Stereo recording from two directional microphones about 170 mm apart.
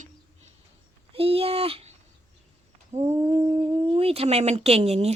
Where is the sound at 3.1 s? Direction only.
20° right (ahead or behind).